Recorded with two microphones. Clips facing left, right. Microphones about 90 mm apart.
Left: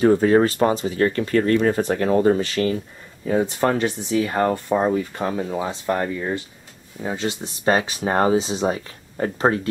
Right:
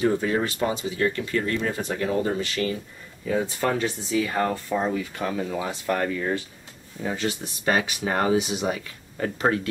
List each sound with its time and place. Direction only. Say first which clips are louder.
0.0 s speech: left 8 dB; 45° left (ahead or behind)
4.3 s speech: left 5 dB; 25° left (ahead or behind)